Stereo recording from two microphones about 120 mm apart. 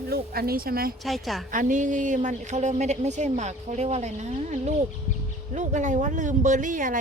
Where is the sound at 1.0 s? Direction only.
Centre (ahead or behind).